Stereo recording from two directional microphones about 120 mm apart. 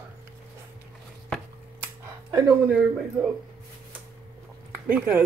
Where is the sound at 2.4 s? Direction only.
5° right (ahead or behind).